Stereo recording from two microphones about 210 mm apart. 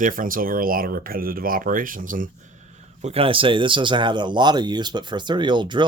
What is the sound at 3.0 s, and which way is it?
Speech, 30° right (ahead or behind).